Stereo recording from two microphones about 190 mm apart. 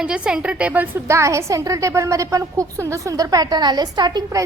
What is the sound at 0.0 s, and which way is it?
A woman's voice, 5° right (ahead or behind).